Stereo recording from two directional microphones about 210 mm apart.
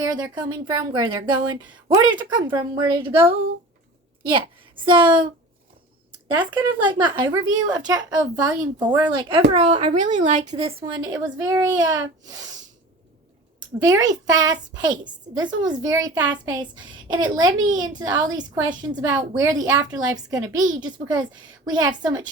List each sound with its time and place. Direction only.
0.0 s speech: 20° right (ahead or behind)
4.2 s a woman's voice: 25° right (ahead or behind)
6.3 s speech: 20° right (ahead or behind)
10.5 s a woman's voice: 25° right (ahead or behind)
13.8 s a woman's voice: 15° right (ahead or behind)